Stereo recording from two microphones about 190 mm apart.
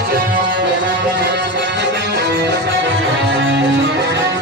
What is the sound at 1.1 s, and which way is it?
Music, 65° right (ahead or behind).